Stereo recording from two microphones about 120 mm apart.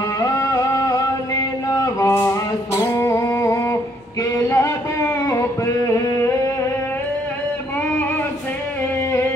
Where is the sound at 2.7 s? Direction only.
25° left (ahead or behind).